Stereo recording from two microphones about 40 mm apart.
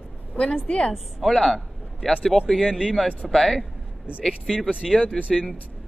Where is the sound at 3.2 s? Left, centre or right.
Centre.